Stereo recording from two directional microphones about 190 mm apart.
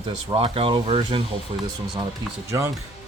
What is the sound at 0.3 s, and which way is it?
Speech, 30° right (ahead or behind).